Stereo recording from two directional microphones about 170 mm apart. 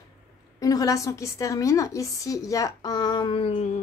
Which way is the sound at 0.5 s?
20° left (ahead or behind).